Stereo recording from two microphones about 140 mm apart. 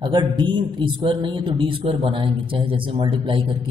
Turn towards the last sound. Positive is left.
turn(degrees=-35)  # may be behind; listen again after turning